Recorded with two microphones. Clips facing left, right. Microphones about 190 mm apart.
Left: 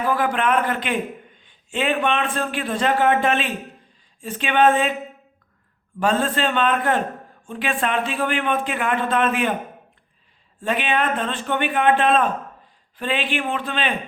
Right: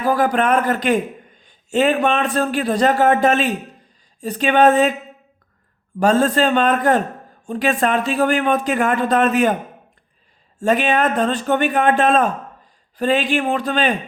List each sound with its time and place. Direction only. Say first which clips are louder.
0.0 s a man's voice: right 4 dB; 40° right (ahead or behind)
6.0 s a man's voice: right 5 dB; 40° right (ahead or behind)
10.6 s a man's voice: right 5 dB; 45° right (ahead or behind)